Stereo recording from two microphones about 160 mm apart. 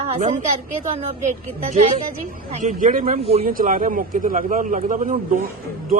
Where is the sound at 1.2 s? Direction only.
45° right (ahead or behind).